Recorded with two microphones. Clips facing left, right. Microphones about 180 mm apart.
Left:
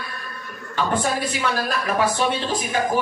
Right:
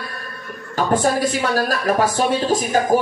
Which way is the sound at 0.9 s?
45° right (ahead or behind).